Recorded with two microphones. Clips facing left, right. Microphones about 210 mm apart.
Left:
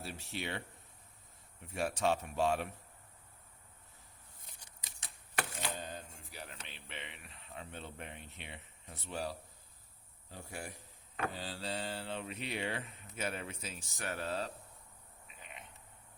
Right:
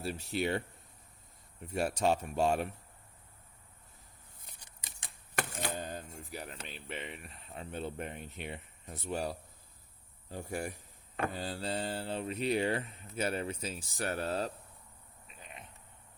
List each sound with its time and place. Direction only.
0.0 s speech: 40° right (ahead or behind)
2.0 s speech: 40° right (ahead or behind)
5.4 s camera: 45° right (ahead or behind)
7.5 s speech: 40° right (ahead or behind)